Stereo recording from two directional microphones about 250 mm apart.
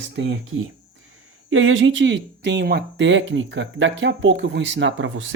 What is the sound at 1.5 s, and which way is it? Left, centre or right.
Speech, right.